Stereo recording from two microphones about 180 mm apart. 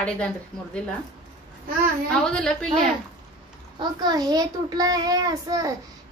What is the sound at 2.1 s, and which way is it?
Speech, 5° left (ahead or behind).